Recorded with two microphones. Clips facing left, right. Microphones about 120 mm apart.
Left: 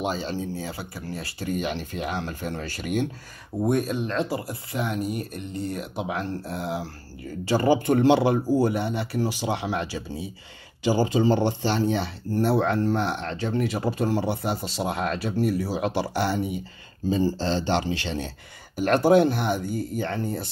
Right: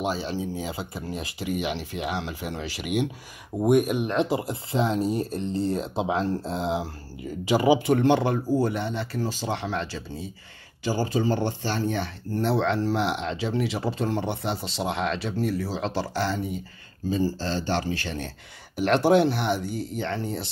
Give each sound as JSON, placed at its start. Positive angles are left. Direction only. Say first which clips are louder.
{"t": 0.0, "sound": "speech", "louder": "even", "side_deg": -5}
{"t": 0.6, "sound": "speech", "louder": "right 2 dB", "side_deg": -20}
{"t": 8.0, "sound": "speech", "louder": "left 2 dB", "side_deg": 10}
{"t": 17.2, "sound": "speech", "louder": "left 2 dB", "side_deg": 25}
{"t": 18.8, "sound": "speech", "louder": "left 1 dB", "side_deg": 0}
{"t": 19.6, "sound": "speech", "louder": "left 2 dB", "side_deg": -65}
{"t": 20.0, "sound": "speech", "louder": "right 1 dB", "side_deg": 5}